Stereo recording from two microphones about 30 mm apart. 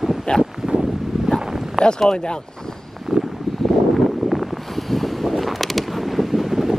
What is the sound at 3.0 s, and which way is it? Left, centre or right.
Wind, centre.